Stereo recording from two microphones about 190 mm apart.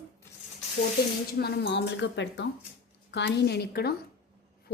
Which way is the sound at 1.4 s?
60° left (ahead or behind).